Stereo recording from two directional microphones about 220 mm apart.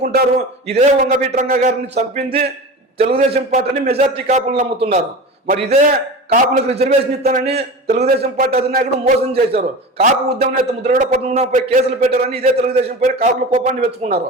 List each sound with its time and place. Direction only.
0.0 s a man's voice: 40° right (ahead or behind)
7.2 s a man's voice: 40° right (ahead or behind)
7.4 s a man's voice: 30° right (ahead or behind)